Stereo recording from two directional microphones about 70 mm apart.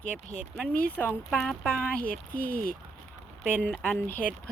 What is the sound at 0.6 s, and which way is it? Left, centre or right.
Speech, centre.